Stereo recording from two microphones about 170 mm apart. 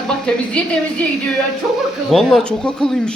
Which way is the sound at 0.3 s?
5° left (ahead or behind).